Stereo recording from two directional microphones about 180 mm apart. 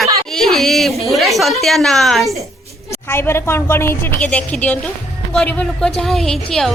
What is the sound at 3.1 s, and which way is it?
A woman's voice, 15° left (ahead or behind).